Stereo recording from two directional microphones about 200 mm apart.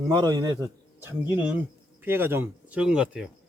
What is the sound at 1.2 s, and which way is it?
Speech, 10° right (ahead or behind).